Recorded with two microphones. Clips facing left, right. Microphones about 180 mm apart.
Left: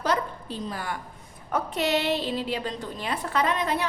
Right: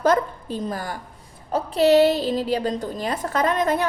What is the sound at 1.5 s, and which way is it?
A woman's voice, 30° right (ahead or behind).